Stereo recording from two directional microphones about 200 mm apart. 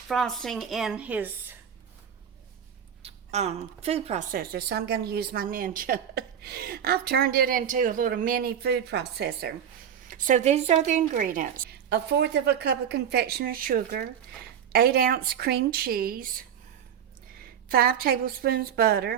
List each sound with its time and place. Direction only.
0.1 s speech: centre (ahead or behind)
3.0 s a woman's voice: 30° right (ahead or behind); by 9.5 s 55° right (ahead or behind)
10.1 s a woman's voice: 40° right (ahead or behind)
17.7 s a woman's voice: 50° right (ahead or behind)